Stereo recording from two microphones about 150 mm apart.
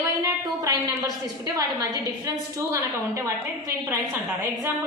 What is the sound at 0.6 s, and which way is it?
A woman's voice, 25° right (ahead or behind).